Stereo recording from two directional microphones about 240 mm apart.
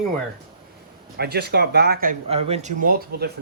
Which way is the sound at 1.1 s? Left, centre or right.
Right.